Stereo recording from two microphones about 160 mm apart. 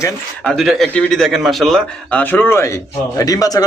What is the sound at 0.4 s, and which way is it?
A man's voice, centre (ahead or behind).